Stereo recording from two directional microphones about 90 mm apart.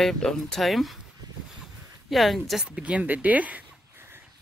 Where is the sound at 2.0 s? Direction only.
Centre (ahead or behind).